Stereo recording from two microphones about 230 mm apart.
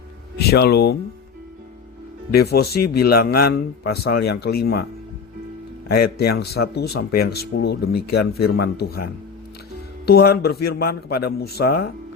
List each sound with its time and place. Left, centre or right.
0.3 s speech: left
2.3 s speech: left
5.9 s speech: left
10.1 s speech: left